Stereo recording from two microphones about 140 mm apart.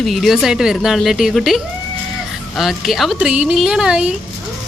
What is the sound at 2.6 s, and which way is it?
A woman's voice, centre (ahead or behind).